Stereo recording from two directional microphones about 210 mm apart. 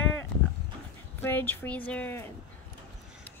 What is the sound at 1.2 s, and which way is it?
A woman's voice, 10° left (ahead or behind).